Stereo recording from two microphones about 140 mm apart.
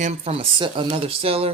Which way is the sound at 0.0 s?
50° right (ahead or behind).